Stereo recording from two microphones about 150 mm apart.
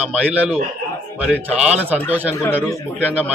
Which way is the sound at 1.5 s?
10° right (ahead or behind).